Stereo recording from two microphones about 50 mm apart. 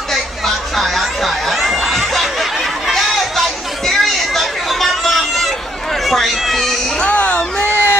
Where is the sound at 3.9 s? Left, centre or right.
Centre.